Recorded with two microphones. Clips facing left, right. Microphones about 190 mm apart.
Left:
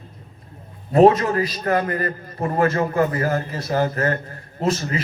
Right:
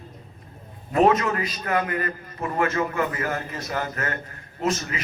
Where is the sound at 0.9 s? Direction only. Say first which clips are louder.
Left 5 dB; 35° left (ahead or behind).